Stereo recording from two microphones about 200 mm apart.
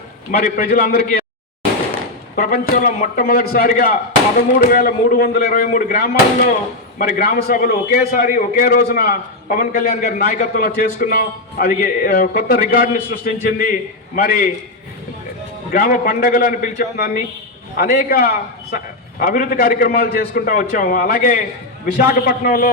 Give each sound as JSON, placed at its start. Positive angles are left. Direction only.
{"t": 0.3, "sound": "a man's voice", "side_deg": 45}
{"t": 2.3, "sound": "a man's voice", "side_deg": 50}
{"t": 15.7, "sound": "a man's voice", "side_deg": 45}